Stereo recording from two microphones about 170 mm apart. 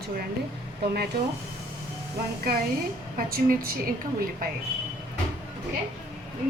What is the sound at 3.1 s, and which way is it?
Speech, 60° right (ahead or behind).